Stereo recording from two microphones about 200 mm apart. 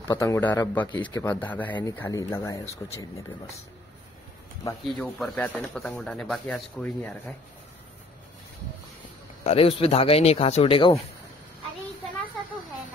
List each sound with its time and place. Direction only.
0.0 s speech: 15° left (ahead or behind)
4.8 s speech: centre (ahead or behind)
9.4 s speech: 30° left (ahead or behind)